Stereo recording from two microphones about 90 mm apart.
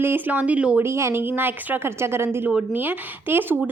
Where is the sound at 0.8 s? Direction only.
30° right (ahead or behind).